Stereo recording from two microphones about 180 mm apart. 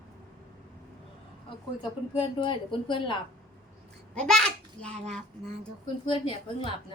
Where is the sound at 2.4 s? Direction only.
25° left (ahead or behind).